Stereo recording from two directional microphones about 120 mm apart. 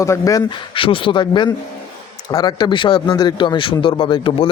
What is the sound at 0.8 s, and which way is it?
Speech, 45° left (ahead or behind).